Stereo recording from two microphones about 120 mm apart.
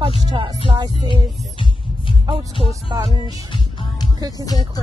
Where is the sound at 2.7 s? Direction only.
35° right (ahead or behind).